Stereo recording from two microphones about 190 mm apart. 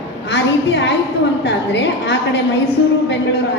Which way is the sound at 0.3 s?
65° left (ahead or behind).